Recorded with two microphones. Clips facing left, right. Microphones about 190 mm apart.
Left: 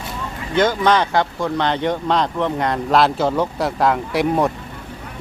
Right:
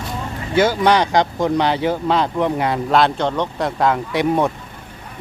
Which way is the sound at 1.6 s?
5° right (ahead or behind).